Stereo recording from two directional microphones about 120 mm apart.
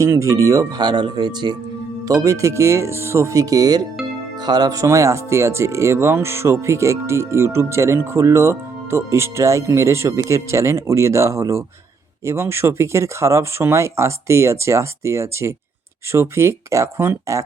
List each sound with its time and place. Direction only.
0.0 s speech: 25° right (ahead or behind)
2.0 s speech: 25° right (ahead or behind)